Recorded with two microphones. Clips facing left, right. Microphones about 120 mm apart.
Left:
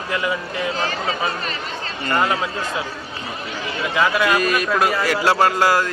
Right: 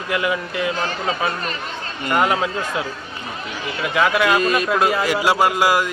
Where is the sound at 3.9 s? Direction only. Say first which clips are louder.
Right 1 dB; 20° right (ahead or behind).